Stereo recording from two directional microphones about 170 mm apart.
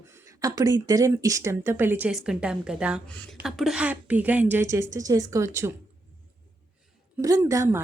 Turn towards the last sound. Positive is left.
turn(degrees=-15)  # may be behind; listen again after turning